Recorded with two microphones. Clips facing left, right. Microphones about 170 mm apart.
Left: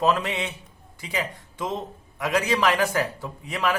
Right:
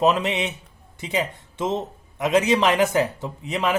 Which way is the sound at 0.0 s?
20° right (ahead or behind).